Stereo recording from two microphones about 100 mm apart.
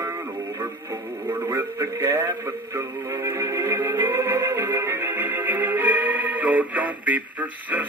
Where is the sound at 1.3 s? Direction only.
25° right (ahead or behind).